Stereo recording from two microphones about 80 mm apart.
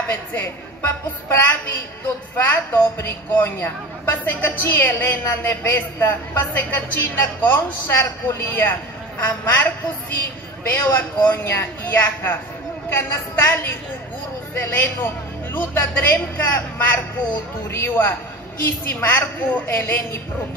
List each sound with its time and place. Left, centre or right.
0.1 s a woman's voice: left